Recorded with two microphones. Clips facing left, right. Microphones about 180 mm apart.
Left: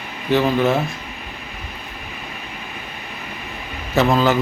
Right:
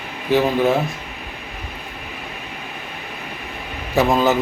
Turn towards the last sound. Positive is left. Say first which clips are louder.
# even
turn(degrees=-15)  # may be behind; listen again after turning